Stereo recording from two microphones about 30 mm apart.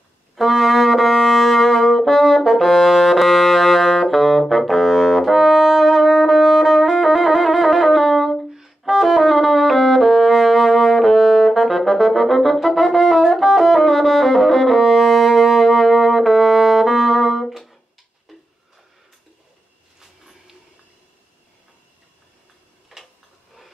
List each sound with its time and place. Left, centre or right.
0.4 s brass instrument: centre
2.6 s music: centre
18.3 s tick-tock: centre
22.9 s tick-tock: centre